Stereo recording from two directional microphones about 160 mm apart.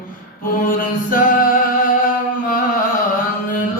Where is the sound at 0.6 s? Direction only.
60° left (ahead or behind).